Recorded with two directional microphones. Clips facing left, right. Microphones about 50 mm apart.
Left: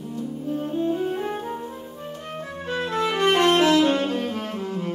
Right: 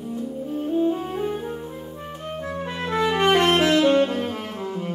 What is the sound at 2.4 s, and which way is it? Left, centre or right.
Music, right.